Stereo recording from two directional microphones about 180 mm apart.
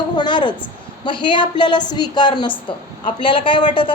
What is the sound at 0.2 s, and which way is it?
A woman's voice, 25° left (ahead or behind).